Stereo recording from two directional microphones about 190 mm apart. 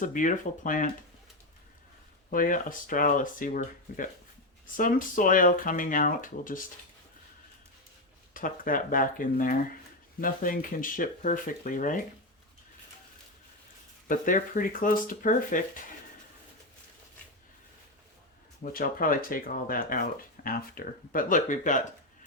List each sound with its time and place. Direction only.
0.0 s speech: 45° left (ahead or behind)
2.3 s speech: 45° left (ahead or behind)
8.3 s speech: 45° left (ahead or behind)
14.1 s speech: 45° left (ahead or behind)
18.6 s speech: 50° left (ahead or behind)